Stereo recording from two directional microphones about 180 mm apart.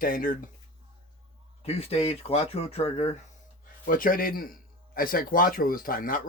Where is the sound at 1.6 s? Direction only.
35° left (ahead or behind).